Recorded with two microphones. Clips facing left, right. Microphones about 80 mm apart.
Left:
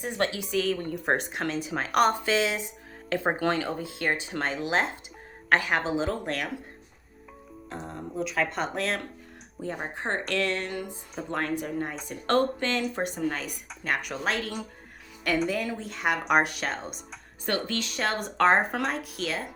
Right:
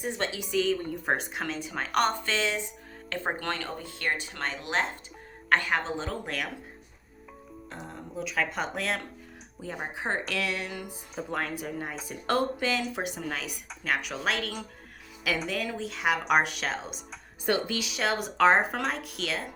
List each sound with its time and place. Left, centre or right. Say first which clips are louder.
0.5 s speech: even; centre; by 4.4 s left
4.4 s speech: left 3 dB; centre
7.7 s speech: left 5 dB; centre
17.4 s speech: right 1 dB; centre